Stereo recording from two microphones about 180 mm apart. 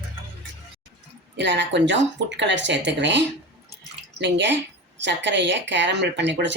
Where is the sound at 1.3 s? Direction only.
75° right (ahead or behind).